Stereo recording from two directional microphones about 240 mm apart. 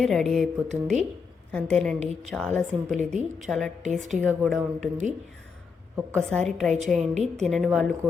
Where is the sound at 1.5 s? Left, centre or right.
Centre.